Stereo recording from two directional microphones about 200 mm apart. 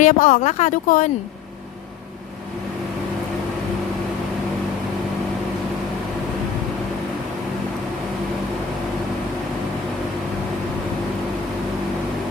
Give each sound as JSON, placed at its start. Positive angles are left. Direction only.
{"t": 0.0, "sound": "speech", "side_deg": 40}